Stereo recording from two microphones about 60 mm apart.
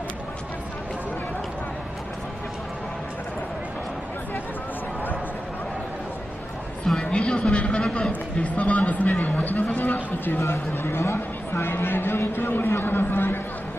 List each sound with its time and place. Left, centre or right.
6.8 s a sound: centre
7.7 s a man's voice: centre
8.1 s speech: left
10.3 s speech: left